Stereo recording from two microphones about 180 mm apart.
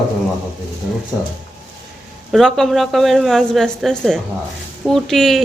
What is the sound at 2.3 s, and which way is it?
A woman's voice, centre (ahead or behind).